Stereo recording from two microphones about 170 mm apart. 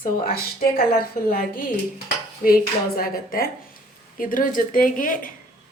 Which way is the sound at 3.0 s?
60° left (ahead or behind).